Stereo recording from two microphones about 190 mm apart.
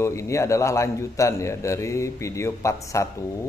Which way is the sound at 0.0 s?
15° left (ahead or behind).